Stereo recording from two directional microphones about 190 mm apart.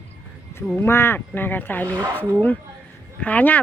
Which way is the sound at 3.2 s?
10° left (ahead or behind).